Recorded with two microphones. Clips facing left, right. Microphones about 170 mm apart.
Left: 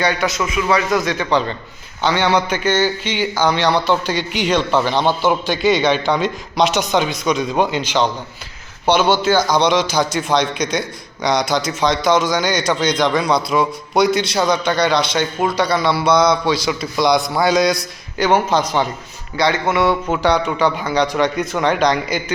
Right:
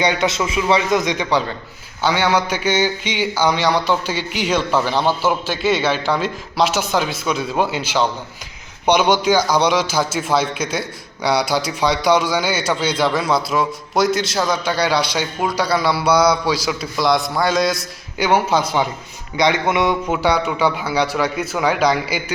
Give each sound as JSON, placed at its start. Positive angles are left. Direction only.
{"t": 0.0, "sound": "a man's voice", "side_deg": -20}